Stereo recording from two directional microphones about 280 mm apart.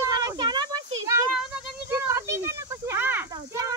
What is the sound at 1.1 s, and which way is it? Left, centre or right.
Child singing, centre.